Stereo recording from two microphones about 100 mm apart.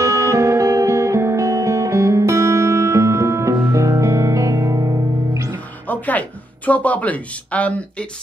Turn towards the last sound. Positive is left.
turn(degrees=15)  # may be behind; listen again after turning